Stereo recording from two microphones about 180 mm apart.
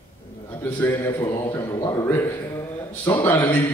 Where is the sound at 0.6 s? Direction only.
15° left (ahead or behind).